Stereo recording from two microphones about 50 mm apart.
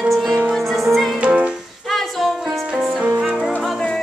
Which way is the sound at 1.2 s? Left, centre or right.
Right.